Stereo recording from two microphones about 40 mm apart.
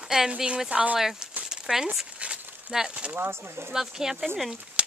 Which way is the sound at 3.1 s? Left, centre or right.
Right.